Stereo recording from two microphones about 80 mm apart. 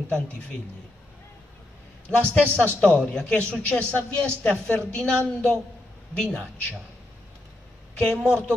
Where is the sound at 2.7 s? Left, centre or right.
Centre.